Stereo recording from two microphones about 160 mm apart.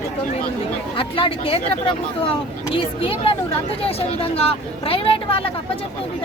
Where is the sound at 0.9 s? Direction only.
35° left (ahead or behind).